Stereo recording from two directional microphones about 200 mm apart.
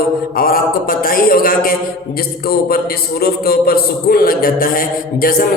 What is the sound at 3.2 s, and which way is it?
A man's voice, 50° left (ahead or behind).